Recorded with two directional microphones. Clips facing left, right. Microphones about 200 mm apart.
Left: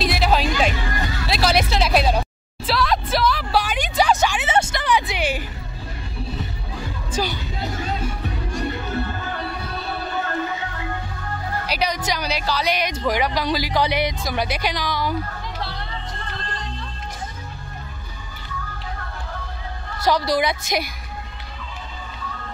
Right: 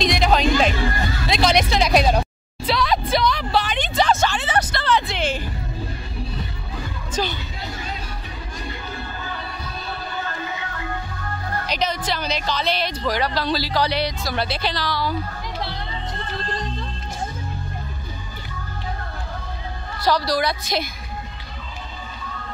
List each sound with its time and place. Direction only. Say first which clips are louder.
0.0 s music: right 2 dB; 5° left (ahead or behind)
1.3 s a sound: right 1 dB; 5° left (ahead or behind)
7.1 s music: even; 10° left (ahead or behind)
11.6 s speech: even; 10° left (ahead or behind)
20.1 s a woman's voice: left 1 dB; 20° left (ahead or behind)